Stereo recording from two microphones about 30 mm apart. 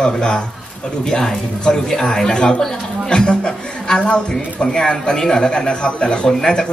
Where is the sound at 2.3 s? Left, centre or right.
Left.